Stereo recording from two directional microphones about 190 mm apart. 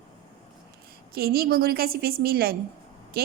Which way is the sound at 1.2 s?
55° right (ahead or behind).